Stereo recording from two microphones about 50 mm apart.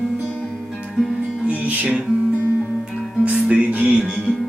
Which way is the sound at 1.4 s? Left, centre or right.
Right.